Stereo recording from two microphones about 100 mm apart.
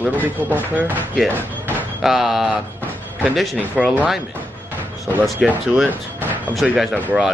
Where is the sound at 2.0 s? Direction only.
5° right (ahead or behind).